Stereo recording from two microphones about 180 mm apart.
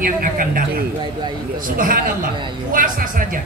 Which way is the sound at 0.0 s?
50° right (ahead or behind).